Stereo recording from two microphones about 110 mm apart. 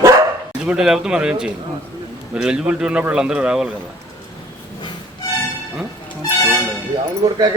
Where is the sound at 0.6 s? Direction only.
5° right (ahead or behind).